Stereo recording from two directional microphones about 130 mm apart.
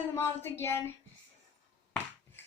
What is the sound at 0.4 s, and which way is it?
Speech, 20° left (ahead or behind).